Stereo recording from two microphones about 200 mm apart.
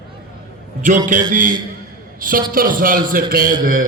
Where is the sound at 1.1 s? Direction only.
40° right (ahead or behind).